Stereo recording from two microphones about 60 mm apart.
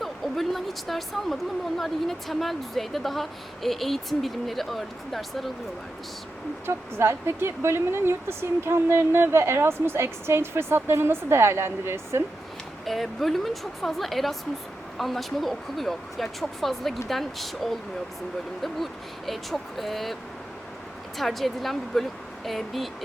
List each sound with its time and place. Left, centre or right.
0.0 s speech: centre
6.7 s speech: right
12.8 s speech: centre
21.2 s speech: centre